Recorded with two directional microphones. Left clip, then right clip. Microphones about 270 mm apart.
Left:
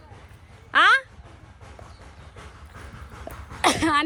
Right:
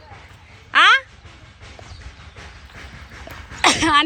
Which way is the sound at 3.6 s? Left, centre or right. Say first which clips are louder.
Right 5 dB; centre.